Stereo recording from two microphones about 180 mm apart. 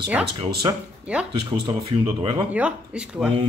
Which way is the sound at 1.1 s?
5° right (ahead or behind).